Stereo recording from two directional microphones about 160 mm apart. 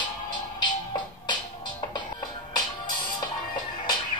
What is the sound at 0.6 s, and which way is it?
Music, 30° left (ahead or behind).